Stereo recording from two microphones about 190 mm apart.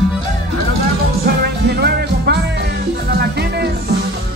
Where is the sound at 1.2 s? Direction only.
55° right (ahead or behind).